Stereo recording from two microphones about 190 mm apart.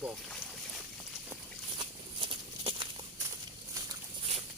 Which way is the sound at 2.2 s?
25° right (ahead or behind).